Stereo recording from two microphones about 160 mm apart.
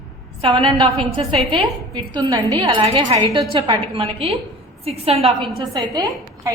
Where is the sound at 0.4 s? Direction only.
30° right (ahead or behind).